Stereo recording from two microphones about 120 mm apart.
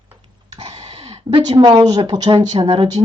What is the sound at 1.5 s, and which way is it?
Speech, 35° right (ahead or behind).